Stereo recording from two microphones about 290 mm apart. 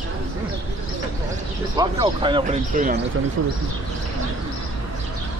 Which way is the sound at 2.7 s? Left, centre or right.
Right.